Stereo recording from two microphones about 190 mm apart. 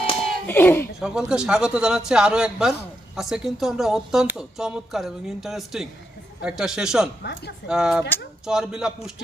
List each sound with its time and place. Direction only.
0.4 s speech: 10° left (ahead or behind)
1.0 s speech: 5° right (ahead or behind)
7.2 s speech: 60° left (ahead or behind)
7.7 s speech: 5° right (ahead or behind)